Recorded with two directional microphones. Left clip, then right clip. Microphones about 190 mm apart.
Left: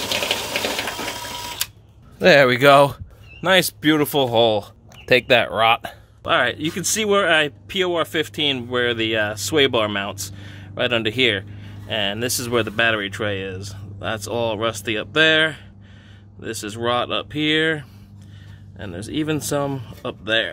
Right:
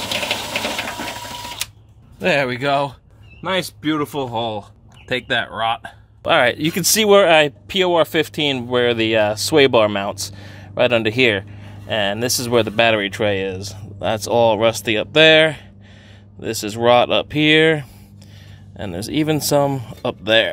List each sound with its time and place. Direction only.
2.1 s speech: 30° left (ahead or behind)
6.2 s speech: 25° right (ahead or behind)